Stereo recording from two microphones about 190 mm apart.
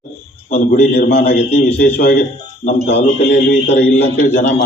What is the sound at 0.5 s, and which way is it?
A man's voice, 45° left (ahead or behind).